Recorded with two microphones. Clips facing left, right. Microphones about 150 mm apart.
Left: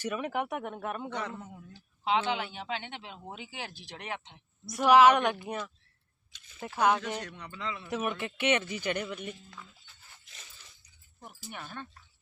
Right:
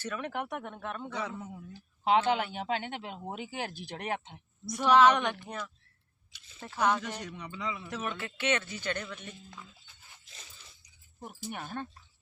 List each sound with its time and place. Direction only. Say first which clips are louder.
0.0 s a man's voice: left 3 dB; 10° left (ahead or behind)
1.1 s a man's voice: even; 5° right (ahead or behind)
2.0 s speech: right 3 dB; 45° right (ahead or behind)
4.6 s a man's voice: left 2 dB; 10° left (ahead or behind)
7.2 s a man's voice: right 1 dB; 10° right (ahead or behind)
7.9 s a man's voice: left 4 dB; 10° left (ahead or behind)
11.5 s speech: right 3 dB; 40° right (ahead or behind)